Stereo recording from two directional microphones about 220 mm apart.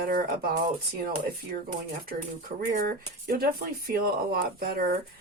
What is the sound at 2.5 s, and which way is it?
Speech, 40° right (ahead or behind).